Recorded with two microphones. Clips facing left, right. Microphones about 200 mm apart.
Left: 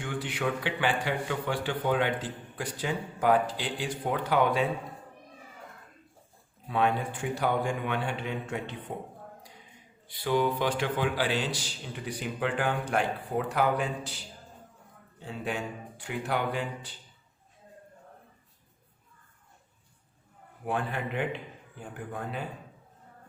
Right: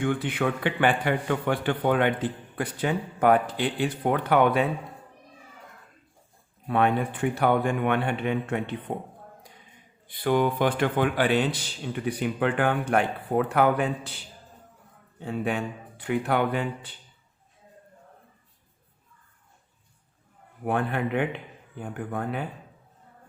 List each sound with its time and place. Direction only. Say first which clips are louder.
0.0 s a man's voice: right 6 dB; 55° right (ahead or behind)
6.7 s a man's voice: right 4 dB; 60° right (ahead or behind)
10.1 s a man's voice: right 4 dB; 55° right (ahead or behind)
20.7 s a man's voice: right 5 dB; 60° right (ahead or behind)